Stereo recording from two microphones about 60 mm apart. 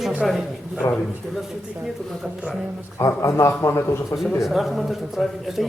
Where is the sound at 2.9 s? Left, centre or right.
Left.